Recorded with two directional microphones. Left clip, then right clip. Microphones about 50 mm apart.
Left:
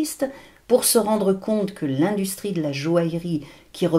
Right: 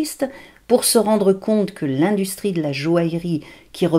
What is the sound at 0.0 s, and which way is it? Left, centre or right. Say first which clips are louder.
Speech: right 2 dB; left.